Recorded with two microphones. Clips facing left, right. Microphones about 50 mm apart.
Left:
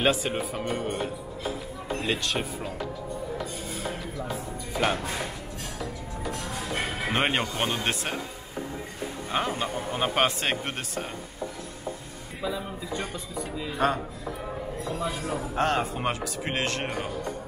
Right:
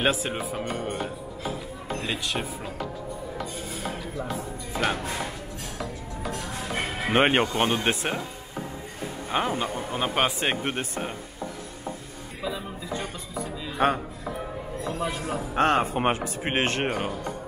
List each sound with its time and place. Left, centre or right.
0.0 s speech: centre
2.0 s speech: centre
4.7 s speech: centre
6.4 s music: centre
7.2 s speech: right
9.3 s speech: centre
10.6 s speech: centre
13.8 s speech: right